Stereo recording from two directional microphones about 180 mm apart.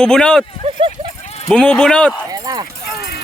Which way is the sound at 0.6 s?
30° right (ahead or behind).